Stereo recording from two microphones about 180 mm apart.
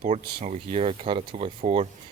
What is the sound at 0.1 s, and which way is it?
Speech, 40° right (ahead or behind).